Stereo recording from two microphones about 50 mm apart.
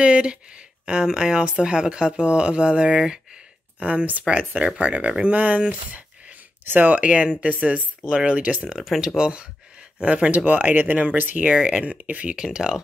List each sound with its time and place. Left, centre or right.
0.0 s a woman's voice: right
3.8 s a woman's voice: right
8.1 s speech: centre
8.4 s a woman's voice: right
9.0 s a woman's voice: centre; by 11.4 s right
11.4 s a woman's voice: right
12.4 s speech: centre